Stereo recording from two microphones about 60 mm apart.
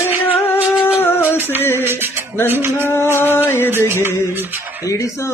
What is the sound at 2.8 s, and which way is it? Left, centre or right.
Music, left.